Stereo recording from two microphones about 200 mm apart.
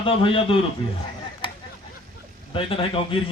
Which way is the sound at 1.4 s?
25° left (ahead or behind).